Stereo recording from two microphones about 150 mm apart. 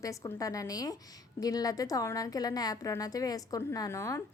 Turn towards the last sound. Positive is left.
turn(degrees=20)  # may be behind; listen again after turning